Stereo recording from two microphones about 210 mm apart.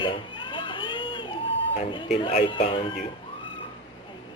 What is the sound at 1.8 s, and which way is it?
Speech, 25° left (ahead or behind).